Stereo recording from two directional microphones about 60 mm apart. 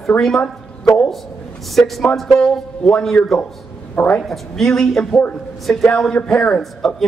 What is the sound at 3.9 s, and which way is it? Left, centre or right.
Speech, left.